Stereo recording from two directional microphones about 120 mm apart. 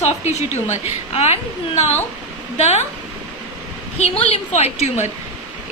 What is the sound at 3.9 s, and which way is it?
A woman's voice, 65° left (ahead or behind).